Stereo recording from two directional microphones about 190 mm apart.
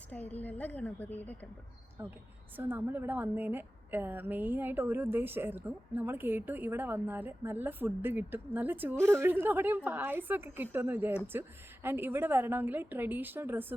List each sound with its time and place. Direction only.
0.1 s a woman's voice: 10° left (ahead or behind)
2.0 s a woman's voice: 15° right (ahead or behind)